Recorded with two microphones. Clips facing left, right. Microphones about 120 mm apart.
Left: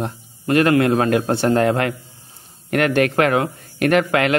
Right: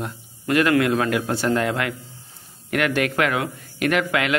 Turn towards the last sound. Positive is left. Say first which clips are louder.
# left 5 dB
turn(degrees=45)  # may be behind; listen again after turning